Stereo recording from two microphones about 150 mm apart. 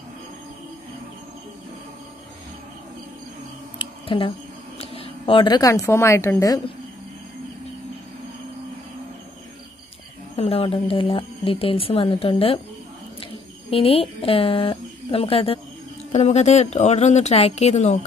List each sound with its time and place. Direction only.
3.7 s a sound: 35° left (ahead or behind)
4.7 s a woman's voice: 40° left (ahead or behind); by 6.6 s 20° left (ahead or behind)
10.3 s speech: 40° left (ahead or behind)
16.1 s speech: 50° left (ahead or behind)